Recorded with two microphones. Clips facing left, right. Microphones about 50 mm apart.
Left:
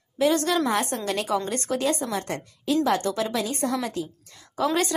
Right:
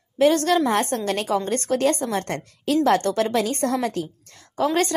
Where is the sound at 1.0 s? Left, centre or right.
Right.